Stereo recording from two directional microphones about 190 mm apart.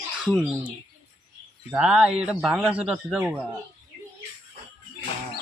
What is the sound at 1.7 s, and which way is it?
Speech, 5° right (ahead or behind).